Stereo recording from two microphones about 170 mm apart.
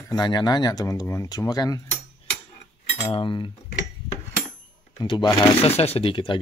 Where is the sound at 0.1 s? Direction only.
25° left (ahead or behind).